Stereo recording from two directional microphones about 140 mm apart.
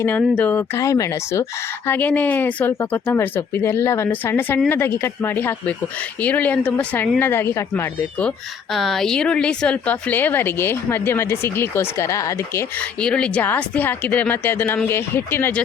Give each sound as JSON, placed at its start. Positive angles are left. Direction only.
{"t": 0.2, "sound": "a woman's voice", "side_deg": 10}
{"t": 0.8, "sound": "speech", "side_deg": 25}
{"t": 1.9, "sound": "a woman's voice", "side_deg": 10}
{"t": 8.7, "sound": "a woman's voice", "side_deg": 0}
{"t": 13.0, "sound": "a woman's voice", "side_deg": 5}